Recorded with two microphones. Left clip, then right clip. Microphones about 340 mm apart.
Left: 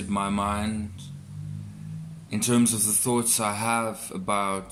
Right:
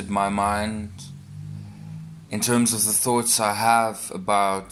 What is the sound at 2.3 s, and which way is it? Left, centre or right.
Speech, centre.